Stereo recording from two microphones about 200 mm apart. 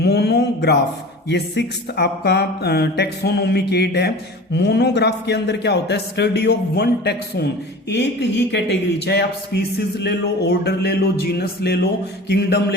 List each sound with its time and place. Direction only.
0.0 s a man's voice: 55° left (ahead or behind)